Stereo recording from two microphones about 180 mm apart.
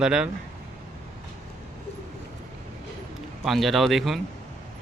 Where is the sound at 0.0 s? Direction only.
5° right (ahead or behind).